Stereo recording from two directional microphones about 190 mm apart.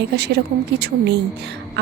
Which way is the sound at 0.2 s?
60° right (ahead or behind).